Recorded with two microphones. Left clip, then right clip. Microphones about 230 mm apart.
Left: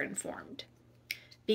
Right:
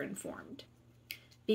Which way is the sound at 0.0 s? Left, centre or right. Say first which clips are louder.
Left 4 dB; centre.